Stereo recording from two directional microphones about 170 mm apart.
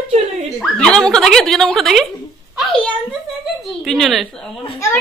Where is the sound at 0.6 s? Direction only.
5° left (ahead or behind).